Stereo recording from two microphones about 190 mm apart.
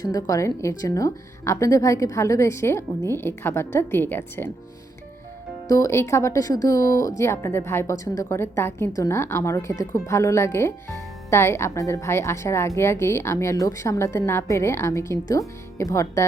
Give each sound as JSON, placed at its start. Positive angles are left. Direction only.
{"t": 0.0, "sound": "speech", "side_deg": 20}
{"t": 5.6, "sound": "speech", "side_deg": 15}